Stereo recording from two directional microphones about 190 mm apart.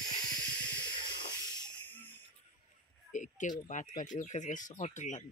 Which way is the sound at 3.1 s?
40° left (ahead or behind).